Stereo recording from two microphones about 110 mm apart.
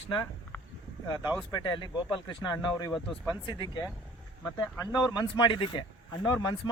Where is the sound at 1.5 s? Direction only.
40° left (ahead or behind).